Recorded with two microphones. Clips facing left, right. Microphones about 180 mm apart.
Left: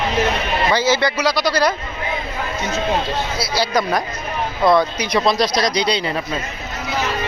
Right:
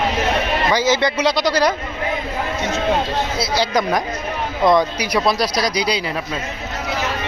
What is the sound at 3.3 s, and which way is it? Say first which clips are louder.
Speech: even; 20° right (ahead or behind).